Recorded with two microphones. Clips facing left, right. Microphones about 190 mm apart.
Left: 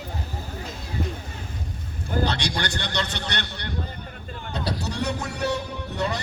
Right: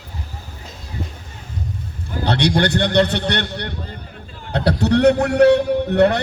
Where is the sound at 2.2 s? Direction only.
60° right (ahead or behind).